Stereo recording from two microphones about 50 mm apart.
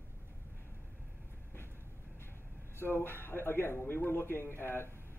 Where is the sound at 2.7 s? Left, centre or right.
Left.